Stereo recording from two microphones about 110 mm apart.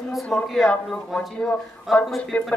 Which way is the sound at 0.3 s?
Centre (ahead or behind).